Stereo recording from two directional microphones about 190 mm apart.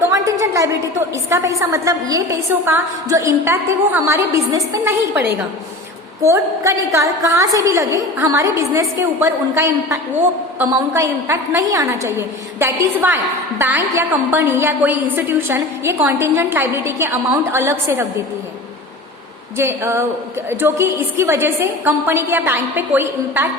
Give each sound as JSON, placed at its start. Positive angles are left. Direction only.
{"t": 0.1, "sound": "a woman's voice", "side_deg": -15}
{"t": 19.5, "sound": "a woman's voice", "side_deg": -15}